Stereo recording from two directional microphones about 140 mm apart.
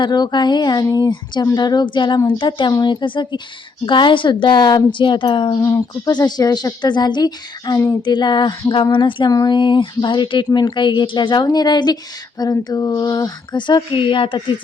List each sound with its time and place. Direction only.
0.0 s a woman's voice: 30° left (ahead or behind)